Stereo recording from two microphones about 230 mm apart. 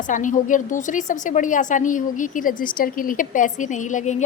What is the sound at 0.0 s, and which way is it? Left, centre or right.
A woman's voice, left.